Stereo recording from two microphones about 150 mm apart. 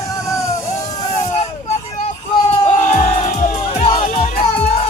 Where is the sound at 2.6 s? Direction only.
50° left (ahead or behind).